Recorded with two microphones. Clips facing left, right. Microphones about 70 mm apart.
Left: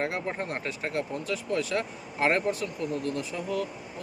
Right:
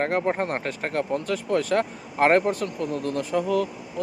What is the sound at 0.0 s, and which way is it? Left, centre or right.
Speech, right.